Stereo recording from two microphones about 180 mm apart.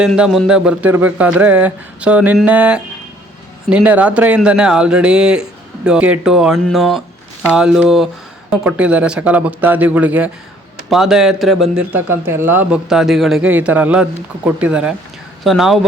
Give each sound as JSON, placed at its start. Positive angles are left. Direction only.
{"t": 0.0, "sound": "speech", "side_deg": 0}